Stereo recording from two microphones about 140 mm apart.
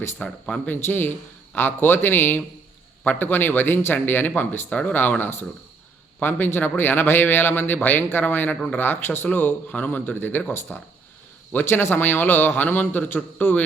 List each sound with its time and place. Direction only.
0.0 s a man's voice: 15° left (ahead or behind)